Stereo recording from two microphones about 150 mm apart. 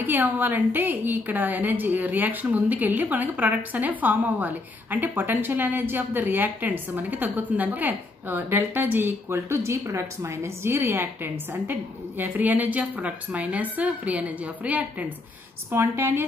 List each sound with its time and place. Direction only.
0.0 s a woman's voice: 10° right (ahead or behind)